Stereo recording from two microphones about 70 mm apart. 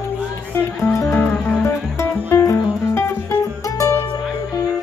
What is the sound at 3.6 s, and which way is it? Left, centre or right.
Music, left.